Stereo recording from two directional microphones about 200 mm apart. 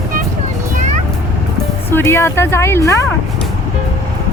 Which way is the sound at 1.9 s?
10° left (ahead or behind).